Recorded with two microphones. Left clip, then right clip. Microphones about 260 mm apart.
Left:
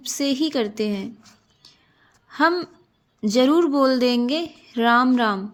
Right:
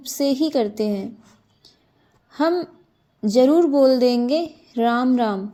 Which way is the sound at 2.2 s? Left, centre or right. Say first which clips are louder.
Left 1 dB; left.